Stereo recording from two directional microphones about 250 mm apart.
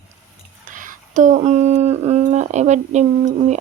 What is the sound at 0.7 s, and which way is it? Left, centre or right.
Speech, right.